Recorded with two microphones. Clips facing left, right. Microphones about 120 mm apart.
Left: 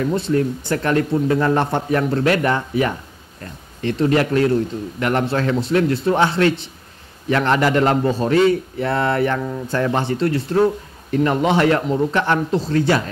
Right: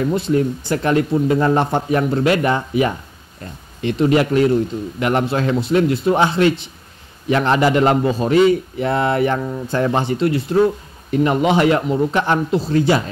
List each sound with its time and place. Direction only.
0.1 s speech: 15° right (ahead or behind)